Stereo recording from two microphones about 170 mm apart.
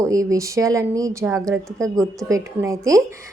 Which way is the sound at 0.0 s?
20° right (ahead or behind).